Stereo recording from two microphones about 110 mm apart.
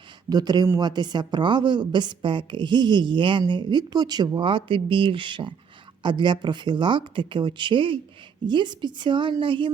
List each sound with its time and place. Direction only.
0.3 s a woman's voice: 35° right (ahead or behind)